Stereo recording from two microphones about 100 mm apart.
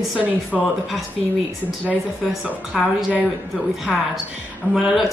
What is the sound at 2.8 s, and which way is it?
Speech, 5° right (ahead or behind).